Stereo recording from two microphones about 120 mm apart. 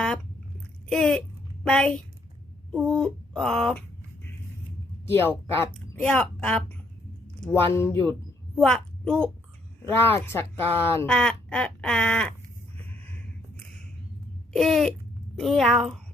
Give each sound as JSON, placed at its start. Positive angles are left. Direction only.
{"t": 0.9, "sound": "a woman's voice", "side_deg": 5}
{"t": 5.0, "sound": "speech", "side_deg": 20}
{"t": 8.5, "sound": "a woman's voice", "side_deg": 5}
{"t": 10.0, "sound": "speech", "side_deg": 20}
{"t": 14.5, "sound": "a woman's voice", "side_deg": 0}